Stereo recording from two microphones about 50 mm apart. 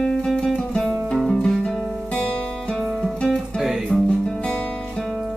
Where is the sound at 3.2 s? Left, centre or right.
Centre.